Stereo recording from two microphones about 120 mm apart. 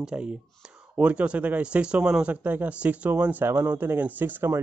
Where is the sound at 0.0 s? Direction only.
10° right (ahead or behind).